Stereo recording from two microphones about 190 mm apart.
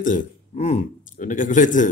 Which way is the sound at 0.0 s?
40° left (ahead or behind).